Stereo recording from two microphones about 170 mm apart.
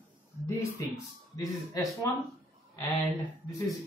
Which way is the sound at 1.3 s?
20° left (ahead or behind).